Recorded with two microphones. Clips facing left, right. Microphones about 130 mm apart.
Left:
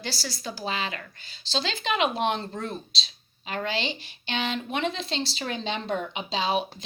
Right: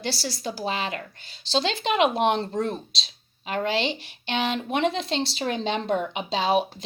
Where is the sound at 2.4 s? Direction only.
35° right (ahead or behind).